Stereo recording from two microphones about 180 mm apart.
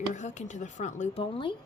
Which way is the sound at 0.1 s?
40° left (ahead or behind).